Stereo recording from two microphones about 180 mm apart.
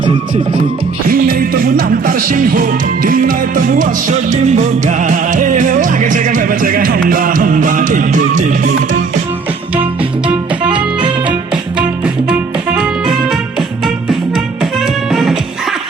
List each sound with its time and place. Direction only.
0.0 s music: 25° right (ahead or behind)
1.0 s music: 55° right (ahead or behind)
12.0 s music: 5° right (ahead or behind)